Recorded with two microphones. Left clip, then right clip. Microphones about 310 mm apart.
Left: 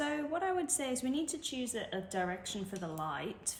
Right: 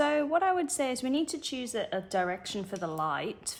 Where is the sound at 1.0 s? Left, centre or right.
Centre.